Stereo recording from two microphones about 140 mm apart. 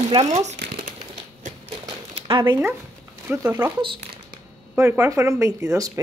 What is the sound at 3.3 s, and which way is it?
Speech, 10° right (ahead or behind).